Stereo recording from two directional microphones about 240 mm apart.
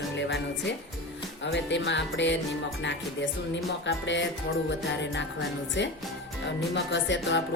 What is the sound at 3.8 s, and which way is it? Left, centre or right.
Speech, left.